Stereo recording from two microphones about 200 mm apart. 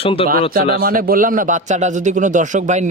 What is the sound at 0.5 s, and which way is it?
A man's voice, 45° right (ahead or behind).